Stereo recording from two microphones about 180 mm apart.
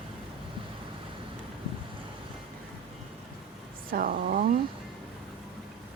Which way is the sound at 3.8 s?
50° right (ahead or behind).